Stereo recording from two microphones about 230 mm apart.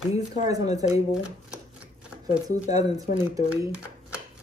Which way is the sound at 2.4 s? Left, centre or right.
Centre.